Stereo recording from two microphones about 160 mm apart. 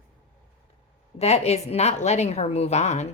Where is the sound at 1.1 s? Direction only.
40° left (ahead or behind).